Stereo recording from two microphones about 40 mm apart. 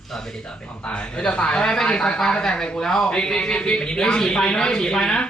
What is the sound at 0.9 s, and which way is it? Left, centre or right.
A man's voice, left.